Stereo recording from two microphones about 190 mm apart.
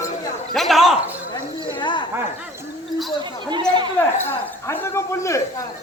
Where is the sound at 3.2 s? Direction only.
25° right (ahead or behind).